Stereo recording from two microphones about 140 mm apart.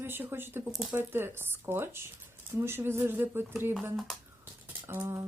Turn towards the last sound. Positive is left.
turn(degrees=-15)  # may be behind; listen again after turning